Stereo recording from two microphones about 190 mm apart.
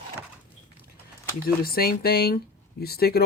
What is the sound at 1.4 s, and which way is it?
Speech, 50° left (ahead or behind).